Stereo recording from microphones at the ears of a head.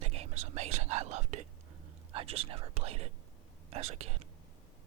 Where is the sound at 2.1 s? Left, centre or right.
Right.